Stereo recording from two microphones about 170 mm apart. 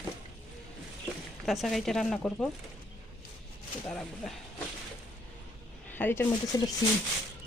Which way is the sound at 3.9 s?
5° left (ahead or behind).